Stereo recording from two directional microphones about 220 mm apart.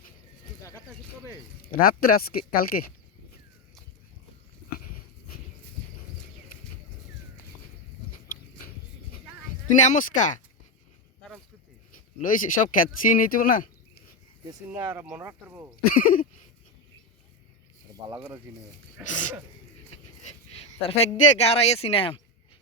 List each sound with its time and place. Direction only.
1.6 s speech: 40° left (ahead or behind)
8.1 s a sound: 40° left (ahead or behind)
9.7 s speech: 35° left (ahead or behind)
11.9 s speech: 40° left (ahead or behind)
14.7 s speech: 10° right (ahead or behind)
15.9 s speech: 40° left (ahead or behind)
19.0 s speech: 35° left (ahead or behind)
20.2 s a sound: 30° left (ahead or behind)
21.2 s speech: 30° left (ahead or behind)